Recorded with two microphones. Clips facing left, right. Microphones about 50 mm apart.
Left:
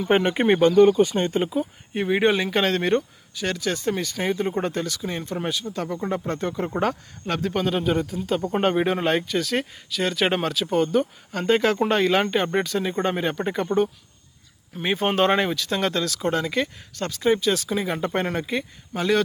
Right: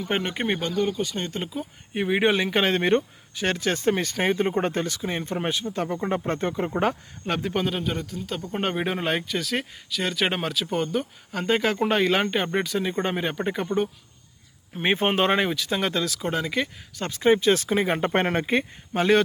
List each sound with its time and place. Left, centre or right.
0.0 s speech: centre
0.6 s speech: left
1.4 s speech: centre
1.9 s speech: centre; by 3.0 s right
3.3 s speech: right
6.7 s speech: centre
7.7 s speech: centre
8.6 s speech: centre
14.8 s speech: right
15.1 s speech: centre
17.1 s speech: right